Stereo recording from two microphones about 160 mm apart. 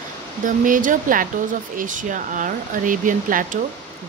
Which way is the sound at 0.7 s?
55° right (ahead or behind).